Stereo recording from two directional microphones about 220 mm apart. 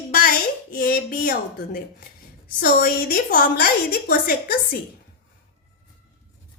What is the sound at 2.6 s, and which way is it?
A woman's voice, 40° left (ahead or behind).